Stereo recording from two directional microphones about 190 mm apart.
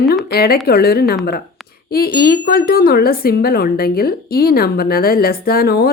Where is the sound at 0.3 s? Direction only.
55° left (ahead or behind).